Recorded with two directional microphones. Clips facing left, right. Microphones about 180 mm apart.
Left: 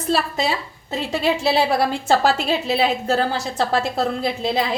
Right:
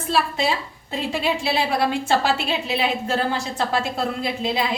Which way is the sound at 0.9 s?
40° left (ahead or behind).